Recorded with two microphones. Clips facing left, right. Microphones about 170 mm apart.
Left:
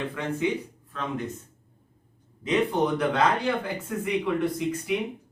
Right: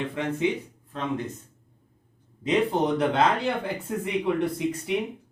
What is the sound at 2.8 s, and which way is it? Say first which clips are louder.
Speech: right 1 dB; 25° right (ahead or behind).